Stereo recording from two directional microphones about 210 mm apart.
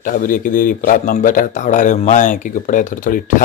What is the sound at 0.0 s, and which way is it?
Speech, 40° left (ahead or behind).